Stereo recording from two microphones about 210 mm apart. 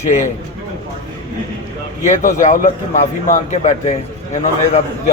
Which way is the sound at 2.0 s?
35° left (ahead or behind).